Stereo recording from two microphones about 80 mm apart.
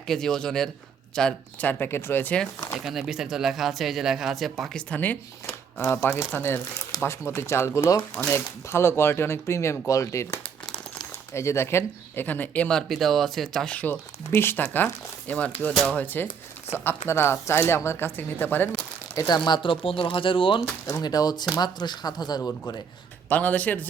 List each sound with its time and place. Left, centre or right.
0.1 s a man's voice: centre
1.6 s speech: left
2.7 s speech: centre
4.9 s speech: left
12.6 s speech: centre
13.7 s speech: centre
14.3 s speech: left
15.3 s a man's voice: centre
18.7 s crumpling: left
19.3 s speech: left
21.0 s speech: left
23.3 s speech: centre